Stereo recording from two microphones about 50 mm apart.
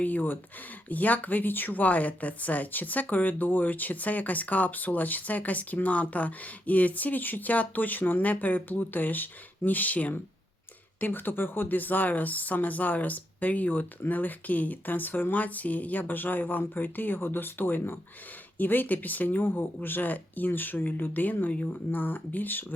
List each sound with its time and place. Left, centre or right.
0.0 s speech: left
11.0 s speech: left
21.5 s speech: left
21.9 s speech: left